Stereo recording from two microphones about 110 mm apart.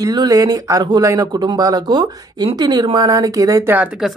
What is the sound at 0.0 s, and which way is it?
Speech, 35° right (ahead or behind).